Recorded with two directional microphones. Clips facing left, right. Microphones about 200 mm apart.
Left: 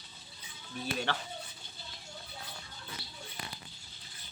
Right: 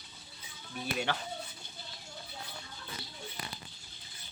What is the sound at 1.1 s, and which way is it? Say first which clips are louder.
Speech: right 1 dB; 15° right (ahead or behind).